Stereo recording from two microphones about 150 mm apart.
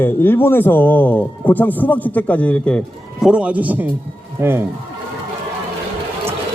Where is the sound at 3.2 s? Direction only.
5° right (ahead or behind).